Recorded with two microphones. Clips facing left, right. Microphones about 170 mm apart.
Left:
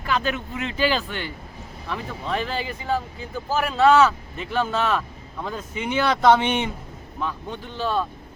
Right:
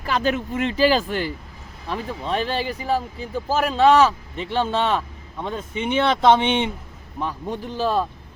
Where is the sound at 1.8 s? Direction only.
30° right (ahead or behind).